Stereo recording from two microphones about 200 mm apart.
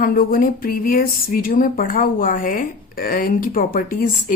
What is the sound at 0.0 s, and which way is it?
A woman's voice, 45° left (ahead or behind).